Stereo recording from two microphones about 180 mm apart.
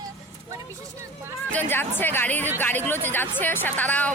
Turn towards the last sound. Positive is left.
turn(degrees=10)  # may be behind; listen again after turning